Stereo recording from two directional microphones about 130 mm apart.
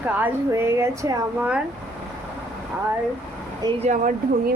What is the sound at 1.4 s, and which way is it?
Speech, 10° right (ahead or behind).